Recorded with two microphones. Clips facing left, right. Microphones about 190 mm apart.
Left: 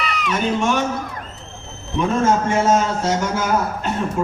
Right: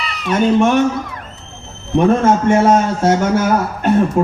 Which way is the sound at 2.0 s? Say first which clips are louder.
Right 5 dB; 60° right (ahead or behind).